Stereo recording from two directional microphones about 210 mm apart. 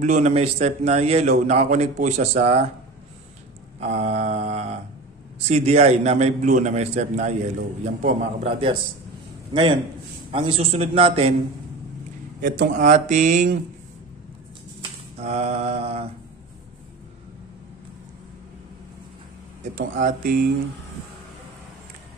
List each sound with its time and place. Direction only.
0.0 s a man's voice: 35° right (ahead or behind)
3.8 s a man's voice: 30° right (ahead or behind)
12.4 s a man's voice: 40° right (ahead or behind)
14.8 s a sound: 30° right (ahead or behind)
19.7 s speech: 40° right (ahead or behind)